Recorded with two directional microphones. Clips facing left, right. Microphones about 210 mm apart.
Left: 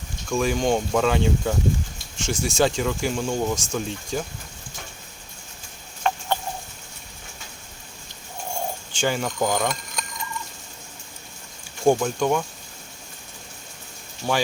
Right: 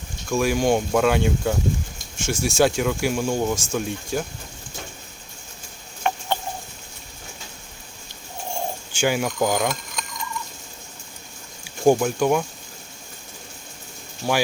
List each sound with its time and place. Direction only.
0.3 s speech: 5° right (ahead or behind)
6.0 s chicken: 20° right (ahead or behind)
9.0 s speech: 10° right (ahead or behind)
11.9 s speech: 5° right (ahead or behind)
14.2 s speech: 10° right (ahead or behind)